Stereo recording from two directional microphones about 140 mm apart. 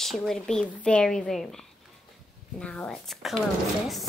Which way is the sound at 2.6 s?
5° left (ahead or behind).